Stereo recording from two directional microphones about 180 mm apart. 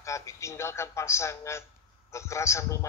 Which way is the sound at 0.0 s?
15° left (ahead or behind).